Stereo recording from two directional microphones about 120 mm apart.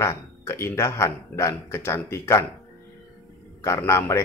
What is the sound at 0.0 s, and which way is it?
Speech, 20° left (ahead or behind).